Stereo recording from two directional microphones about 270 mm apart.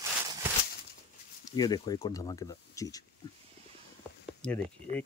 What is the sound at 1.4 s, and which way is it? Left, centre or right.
Speech, centre.